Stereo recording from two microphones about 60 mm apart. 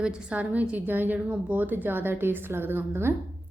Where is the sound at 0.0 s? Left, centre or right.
Centre.